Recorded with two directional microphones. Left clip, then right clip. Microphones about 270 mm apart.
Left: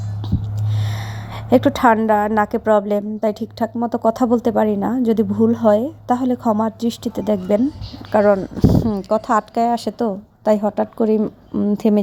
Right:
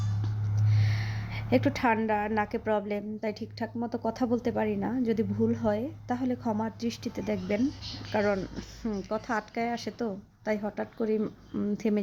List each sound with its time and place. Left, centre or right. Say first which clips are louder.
1.3 s a woman's voice: left 12 dB; centre